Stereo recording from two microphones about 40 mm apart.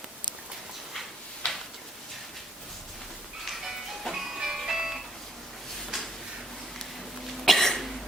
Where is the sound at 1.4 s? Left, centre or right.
Left.